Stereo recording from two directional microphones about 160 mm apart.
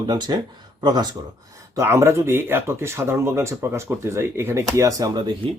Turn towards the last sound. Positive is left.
turn(degrees=-25)  # may be behind; listen again after turning